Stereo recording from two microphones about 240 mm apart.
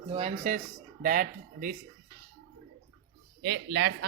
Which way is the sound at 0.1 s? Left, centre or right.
Right.